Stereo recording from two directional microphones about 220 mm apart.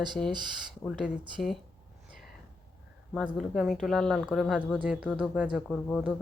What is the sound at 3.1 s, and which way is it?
Speech, centre (ahead or behind).